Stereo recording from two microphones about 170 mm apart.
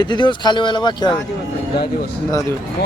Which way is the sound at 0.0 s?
25° left (ahead or behind).